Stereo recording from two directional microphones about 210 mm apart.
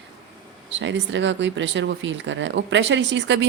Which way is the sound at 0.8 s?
60° right (ahead or behind).